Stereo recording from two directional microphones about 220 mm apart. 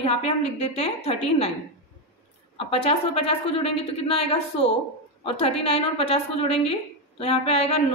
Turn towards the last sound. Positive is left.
turn(degrees=25)  # may be behind; listen again after turning